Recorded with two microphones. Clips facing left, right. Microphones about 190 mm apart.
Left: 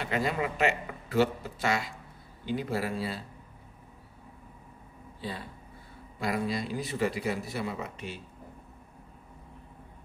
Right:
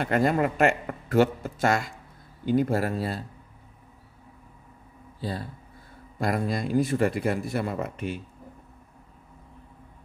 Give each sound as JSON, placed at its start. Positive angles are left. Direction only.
{"t": 0.0, "sound": "speech", "side_deg": -50}
{"t": 5.2, "sound": "speech", "side_deg": -40}